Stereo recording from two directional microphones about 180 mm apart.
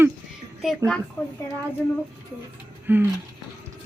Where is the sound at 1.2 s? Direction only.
5° left (ahead or behind).